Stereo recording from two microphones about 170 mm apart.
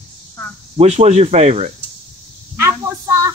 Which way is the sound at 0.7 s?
40° right (ahead or behind).